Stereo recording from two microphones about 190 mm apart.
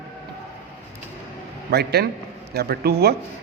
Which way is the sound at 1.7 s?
60° right (ahead or behind).